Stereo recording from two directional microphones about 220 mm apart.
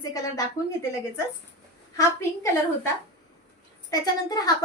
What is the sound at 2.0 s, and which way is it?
A woman's voice, 15° left (ahead or behind).